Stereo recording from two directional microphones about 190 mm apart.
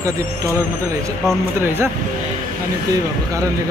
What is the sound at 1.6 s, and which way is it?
Speech, 15° right (ahead or behind).